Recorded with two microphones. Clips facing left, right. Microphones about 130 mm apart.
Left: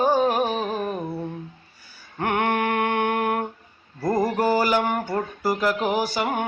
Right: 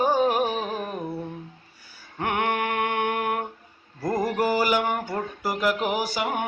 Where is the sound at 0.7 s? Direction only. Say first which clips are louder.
Left 3 dB; 20° left (ahead or behind).